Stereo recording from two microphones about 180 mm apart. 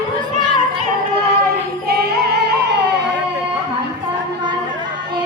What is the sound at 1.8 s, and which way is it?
Music, 60° right (ahead or behind).